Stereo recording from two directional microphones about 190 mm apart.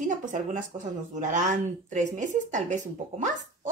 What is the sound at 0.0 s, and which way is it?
Speech, 40° right (ahead or behind).